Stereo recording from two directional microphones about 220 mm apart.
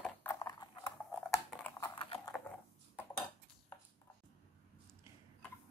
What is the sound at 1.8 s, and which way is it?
Horse, 20° left (ahead or behind).